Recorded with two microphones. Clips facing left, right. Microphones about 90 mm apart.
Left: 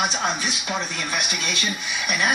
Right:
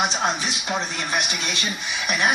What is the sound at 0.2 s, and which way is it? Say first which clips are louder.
Speech: right 1 dB; 25° right (ahead or behind).